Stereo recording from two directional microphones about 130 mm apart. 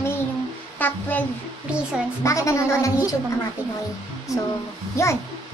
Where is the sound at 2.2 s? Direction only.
25° left (ahead or behind).